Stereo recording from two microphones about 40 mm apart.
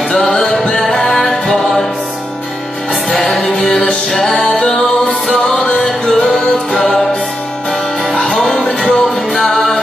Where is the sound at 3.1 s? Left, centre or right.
Left.